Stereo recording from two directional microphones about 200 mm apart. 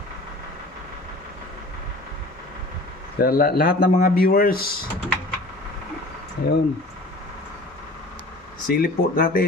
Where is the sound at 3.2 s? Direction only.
50° left (ahead or behind).